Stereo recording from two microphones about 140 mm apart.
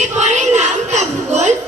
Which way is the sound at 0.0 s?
55° right (ahead or behind).